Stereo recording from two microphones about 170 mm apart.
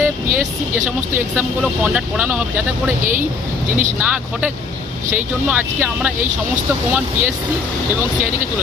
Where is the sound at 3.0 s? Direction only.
50° right (ahead or behind).